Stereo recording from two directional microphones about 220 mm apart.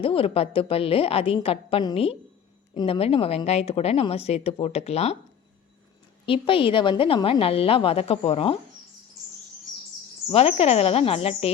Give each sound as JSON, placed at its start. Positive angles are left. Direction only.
{"t": 0.0, "sound": "a woman's voice", "side_deg": 25}
{"t": 6.2, "sound": "a woman's voice", "side_deg": 25}
{"t": 10.2, "sound": "a woman's voice", "side_deg": 25}